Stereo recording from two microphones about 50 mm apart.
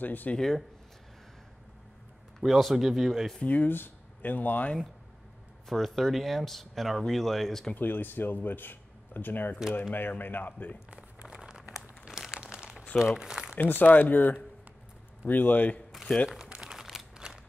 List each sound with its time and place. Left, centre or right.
0.0 s speech: left
0.4 s speech: centre
2.4 s speech: centre
3.4 s speech: left
5.7 s speech: centre
7.7 s speech: left
10.9 s crumpling: right
13.6 s speech: left
16.3 s crumpling: centre
16.7 s a sound: centre